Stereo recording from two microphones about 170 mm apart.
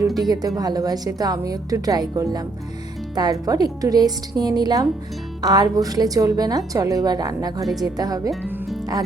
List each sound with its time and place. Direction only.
0.3 s a woman's voice: 20° right (ahead or behind)
7.6 s a woman's voice: centre (ahead or behind)
7.9 s a woman's voice: 20° right (ahead or behind)